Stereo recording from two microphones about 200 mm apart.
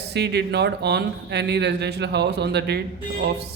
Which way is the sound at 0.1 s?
55° right (ahead or behind).